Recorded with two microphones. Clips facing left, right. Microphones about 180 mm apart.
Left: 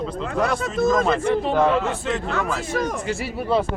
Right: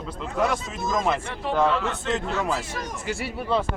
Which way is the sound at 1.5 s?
10° left (ahead or behind).